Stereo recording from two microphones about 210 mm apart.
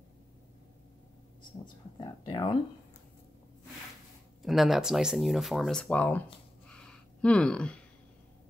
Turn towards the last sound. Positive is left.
turn(degrees=5)  # may be behind; listen again after turning